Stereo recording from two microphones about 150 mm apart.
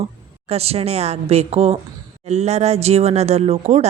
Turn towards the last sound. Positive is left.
turn(degrees=-45)  # may be behind; listen again after turning